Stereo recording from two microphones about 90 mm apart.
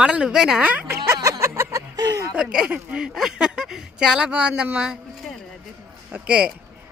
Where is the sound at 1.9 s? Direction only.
45° right (ahead or behind).